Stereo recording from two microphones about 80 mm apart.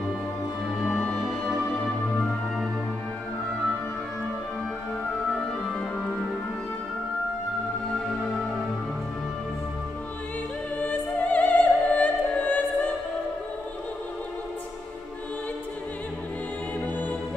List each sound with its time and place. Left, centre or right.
0.8 s music: centre
10.8 s opera: centre